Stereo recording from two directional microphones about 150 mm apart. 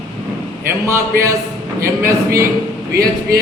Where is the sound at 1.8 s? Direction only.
20° right (ahead or behind).